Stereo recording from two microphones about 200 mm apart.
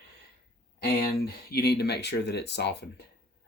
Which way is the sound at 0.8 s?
50° left (ahead or behind).